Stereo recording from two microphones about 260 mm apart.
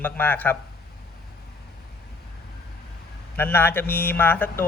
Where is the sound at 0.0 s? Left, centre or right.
Centre.